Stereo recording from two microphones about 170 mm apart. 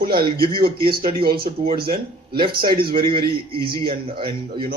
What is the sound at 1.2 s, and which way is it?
Speech, 60° right (ahead or behind).